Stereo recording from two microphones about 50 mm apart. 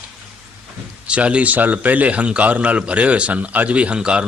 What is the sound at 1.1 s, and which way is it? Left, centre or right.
A man's voice, right.